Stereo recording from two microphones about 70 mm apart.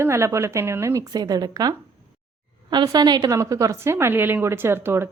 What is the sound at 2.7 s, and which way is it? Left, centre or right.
Speech, right.